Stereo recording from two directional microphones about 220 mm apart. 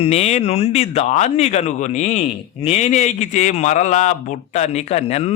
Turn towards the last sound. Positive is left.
turn(degrees=30)  # may be behind; listen again after turning